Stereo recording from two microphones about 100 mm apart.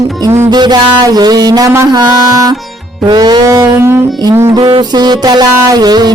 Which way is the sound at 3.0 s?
45° right (ahead or behind).